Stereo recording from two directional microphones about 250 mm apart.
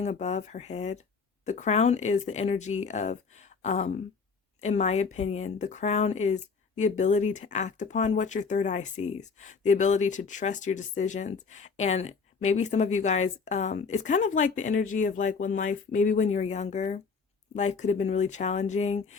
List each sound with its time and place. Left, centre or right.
0.0 s speech: left